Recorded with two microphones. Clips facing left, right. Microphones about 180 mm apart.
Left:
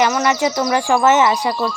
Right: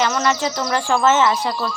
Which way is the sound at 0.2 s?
15° left (ahead or behind).